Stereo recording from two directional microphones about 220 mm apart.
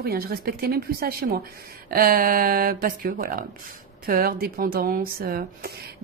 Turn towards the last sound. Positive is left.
turn(degrees=-45)  # may be behind; listen again after turning